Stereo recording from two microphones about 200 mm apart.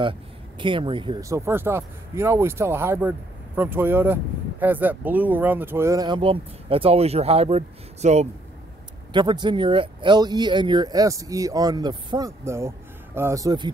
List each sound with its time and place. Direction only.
0.6 s speech: 25° right (ahead or behind)
9.1 s speech: 25° right (ahead or behind)